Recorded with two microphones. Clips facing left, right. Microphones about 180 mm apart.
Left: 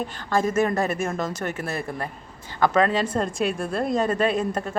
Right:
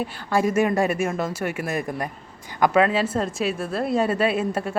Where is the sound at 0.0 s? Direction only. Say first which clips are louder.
Right 1 dB; 10° right (ahead or behind).